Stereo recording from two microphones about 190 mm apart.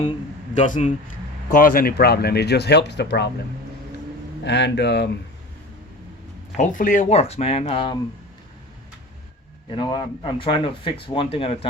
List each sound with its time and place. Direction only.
0.5 s speech: 40° left (ahead or behind); by 3.2 s 60° left (ahead or behind)
4.4 s speech: 65° left (ahead or behind)
6.6 s speech: 45° left (ahead or behind); by 7.9 s 30° left (ahead or behind)
9.6 s speech: 25° left (ahead or behind)